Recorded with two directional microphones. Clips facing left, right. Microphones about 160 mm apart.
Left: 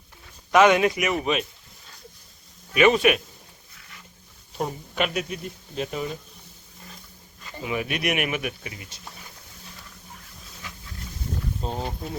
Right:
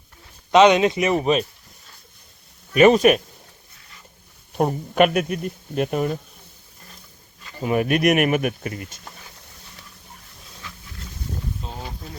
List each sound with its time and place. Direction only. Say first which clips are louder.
0.5 s speech: right 3 dB; 20° right (ahead or behind); by 1.5 s 35° right (ahead or behind)
2.7 s a man's voice: right 5 dB; 40° right (ahead or behind)
4.5 s speech: right 9 dB; 55° right (ahead or behind)
7.6 s speech: right 8 dB; 45° right (ahead or behind)
11.6 s a sound: left 6 dB; 40° left (ahead or behind)